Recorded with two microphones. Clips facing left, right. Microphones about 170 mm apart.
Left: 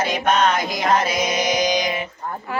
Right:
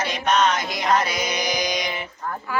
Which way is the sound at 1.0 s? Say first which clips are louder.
Left 4 dB; centre (ahead or behind).